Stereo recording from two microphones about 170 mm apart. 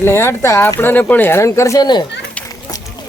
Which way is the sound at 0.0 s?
15° left (ahead or behind).